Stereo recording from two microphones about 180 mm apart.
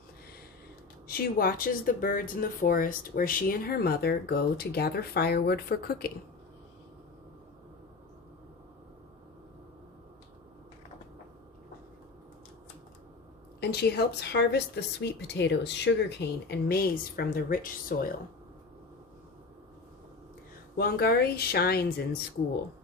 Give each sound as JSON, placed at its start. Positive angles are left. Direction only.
{"t": 1.0, "sound": "speech", "side_deg": 55}
{"t": 13.6, "sound": "speech", "side_deg": 65}
{"t": 20.7, "sound": "speech", "side_deg": 60}